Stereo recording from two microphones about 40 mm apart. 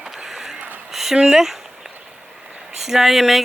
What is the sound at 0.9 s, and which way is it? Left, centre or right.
Speech, centre.